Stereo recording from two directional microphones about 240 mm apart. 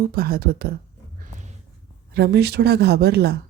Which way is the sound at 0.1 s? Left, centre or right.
Right.